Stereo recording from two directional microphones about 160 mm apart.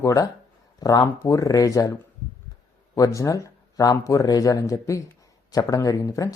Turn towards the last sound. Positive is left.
turn(degrees=20)  # may be behind; listen again after turning